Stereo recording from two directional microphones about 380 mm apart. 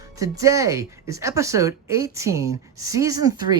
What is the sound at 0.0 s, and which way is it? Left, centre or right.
Speech, centre.